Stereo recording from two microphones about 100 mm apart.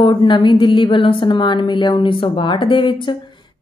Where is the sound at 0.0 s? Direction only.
50° left (ahead or behind).